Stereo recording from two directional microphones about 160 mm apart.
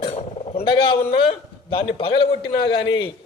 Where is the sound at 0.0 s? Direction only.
40° left (ahead or behind).